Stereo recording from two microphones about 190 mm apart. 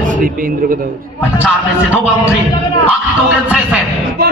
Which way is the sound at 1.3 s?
5° right (ahead or behind).